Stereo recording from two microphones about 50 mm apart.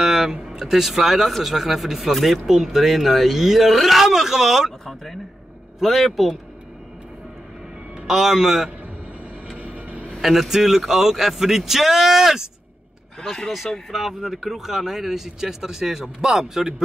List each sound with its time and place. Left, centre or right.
0.0 s speech: centre
8.1 s speech: centre
9.6 s vehicle: right
10.2 s speech: centre
13.2 s speech: centre
13.9 s speech: centre